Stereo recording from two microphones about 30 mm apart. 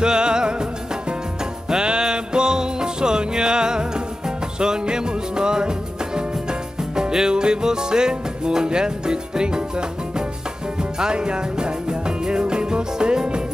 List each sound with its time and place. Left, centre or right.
0.0 s music: right
1.7 s music: right